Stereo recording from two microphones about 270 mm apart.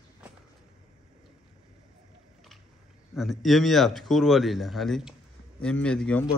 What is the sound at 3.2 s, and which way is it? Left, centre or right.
Speech, centre.